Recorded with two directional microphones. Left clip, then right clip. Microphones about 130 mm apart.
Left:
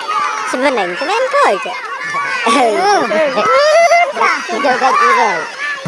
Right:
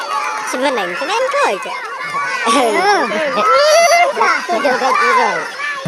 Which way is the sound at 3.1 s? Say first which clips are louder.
Left 1 dB; 35° left (ahead or behind).